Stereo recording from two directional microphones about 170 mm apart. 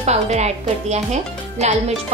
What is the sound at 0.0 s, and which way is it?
Speech, 40° right (ahead or behind).